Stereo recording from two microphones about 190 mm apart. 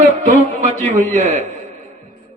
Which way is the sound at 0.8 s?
40° right (ahead or behind).